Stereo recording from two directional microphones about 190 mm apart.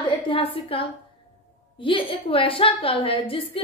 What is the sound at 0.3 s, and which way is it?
A woman's voice, 30° left (ahead or behind).